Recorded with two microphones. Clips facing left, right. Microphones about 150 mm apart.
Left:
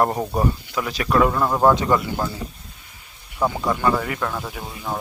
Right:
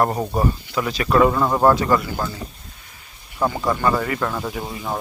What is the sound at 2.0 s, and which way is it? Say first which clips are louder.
Speech: left 1 dB; 25° left (ahead or behind).